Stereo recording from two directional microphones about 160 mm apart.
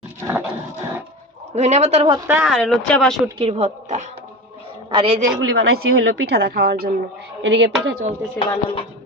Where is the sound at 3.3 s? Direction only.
40° right (ahead or behind).